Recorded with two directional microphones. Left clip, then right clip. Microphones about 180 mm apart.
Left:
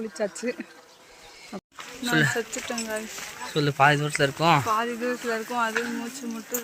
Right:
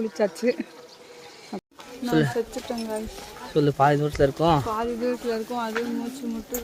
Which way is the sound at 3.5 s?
15° right (ahead or behind).